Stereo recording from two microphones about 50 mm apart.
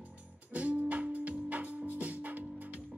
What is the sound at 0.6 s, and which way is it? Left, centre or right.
Music, right.